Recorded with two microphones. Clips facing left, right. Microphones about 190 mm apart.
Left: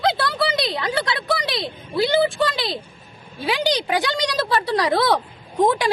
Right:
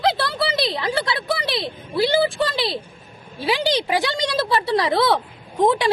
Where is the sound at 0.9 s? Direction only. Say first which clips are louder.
Right 1 dB; 25° right (ahead or behind).